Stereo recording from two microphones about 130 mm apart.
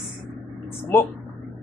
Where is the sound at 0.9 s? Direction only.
20° left (ahead or behind).